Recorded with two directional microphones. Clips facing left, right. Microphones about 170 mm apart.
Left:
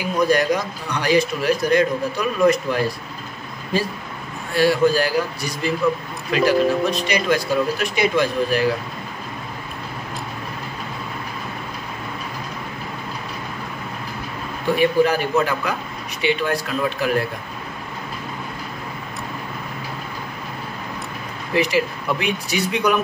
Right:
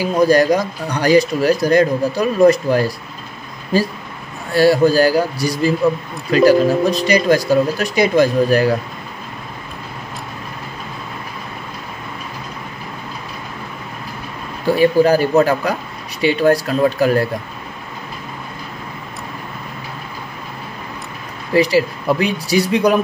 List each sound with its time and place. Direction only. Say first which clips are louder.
0.0 s speech: right 5 dB; 35° right (ahead or behind)
4.6 s speech: right 5 dB; 40° right (ahead or behind)
14.8 s speech: right 5 dB; 35° right (ahead or behind)
21.5 s speech: right 5 dB; 35° right (ahead or behind)